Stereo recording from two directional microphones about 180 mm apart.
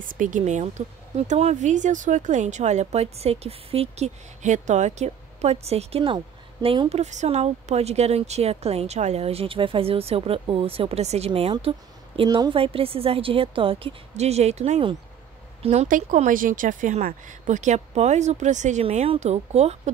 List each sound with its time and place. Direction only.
0.0 s speech: 45° right (ahead or behind)